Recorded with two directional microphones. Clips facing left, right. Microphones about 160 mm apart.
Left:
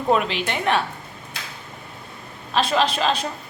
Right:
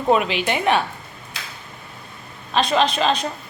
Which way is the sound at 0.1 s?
5° right (ahead or behind).